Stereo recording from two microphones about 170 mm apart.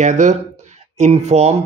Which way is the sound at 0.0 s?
45° right (ahead or behind).